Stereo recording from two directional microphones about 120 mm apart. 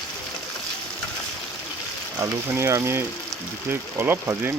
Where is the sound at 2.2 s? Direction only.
20° right (ahead or behind).